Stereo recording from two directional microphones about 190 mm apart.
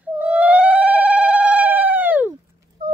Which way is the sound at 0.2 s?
5° right (ahead or behind).